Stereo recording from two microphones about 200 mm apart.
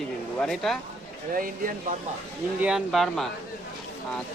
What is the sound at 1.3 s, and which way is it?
Speech, 45° right (ahead or behind).